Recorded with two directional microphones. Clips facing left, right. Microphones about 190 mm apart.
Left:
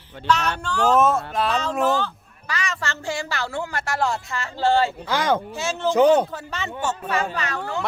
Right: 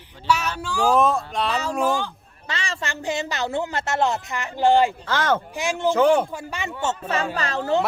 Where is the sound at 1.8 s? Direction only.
15° right (ahead or behind).